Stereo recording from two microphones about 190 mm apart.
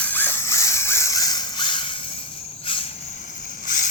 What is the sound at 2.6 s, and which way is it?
Cricket, 30° left (ahead or behind).